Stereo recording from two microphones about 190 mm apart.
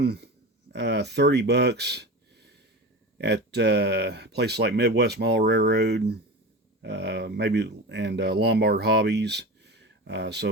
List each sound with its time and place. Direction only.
0.0 s speech: 60° right (ahead or behind)